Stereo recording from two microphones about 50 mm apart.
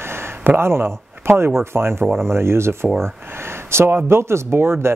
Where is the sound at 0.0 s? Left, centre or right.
Right.